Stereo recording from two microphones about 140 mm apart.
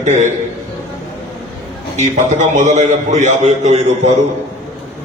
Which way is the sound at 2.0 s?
60° right (ahead or behind).